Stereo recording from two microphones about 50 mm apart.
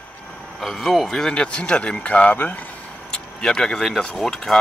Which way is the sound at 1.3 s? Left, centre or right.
Left.